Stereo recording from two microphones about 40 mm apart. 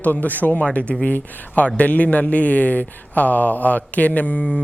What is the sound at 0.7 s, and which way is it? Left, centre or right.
A man's voice, left.